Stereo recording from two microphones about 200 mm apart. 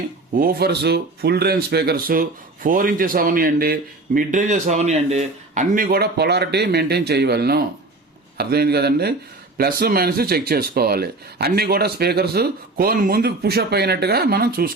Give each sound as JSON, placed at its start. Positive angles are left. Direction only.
{"t": 0.3, "sound": "speech", "side_deg": -50}